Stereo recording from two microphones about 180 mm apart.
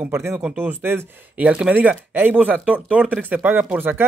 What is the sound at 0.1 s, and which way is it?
Speech, 15° right (ahead or behind).